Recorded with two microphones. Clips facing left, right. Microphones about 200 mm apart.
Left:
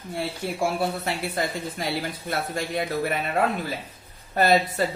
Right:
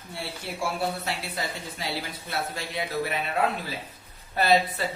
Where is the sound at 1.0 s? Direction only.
50° left (ahead or behind).